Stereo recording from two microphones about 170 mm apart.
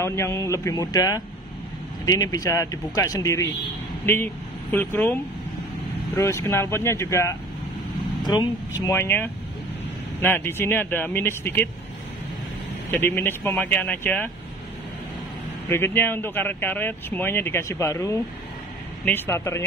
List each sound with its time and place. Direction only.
0.0 s speech: 15° left (ahead or behind)
8.8 s speech: 15° left (ahead or behind)
12.9 s speech: 15° left (ahead or behind)
15.7 s speech: 15° left (ahead or behind)